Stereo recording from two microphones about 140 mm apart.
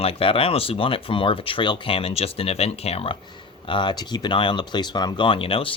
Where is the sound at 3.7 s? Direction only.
35° left (ahead or behind).